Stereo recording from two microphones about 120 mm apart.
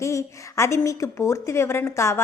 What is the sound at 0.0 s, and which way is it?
A woman's voice, 25° left (ahead or behind).